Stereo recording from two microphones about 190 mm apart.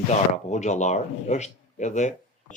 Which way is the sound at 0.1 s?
40° left (ahead or behind).